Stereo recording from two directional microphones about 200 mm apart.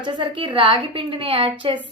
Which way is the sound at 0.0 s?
25° right (ahead or behind).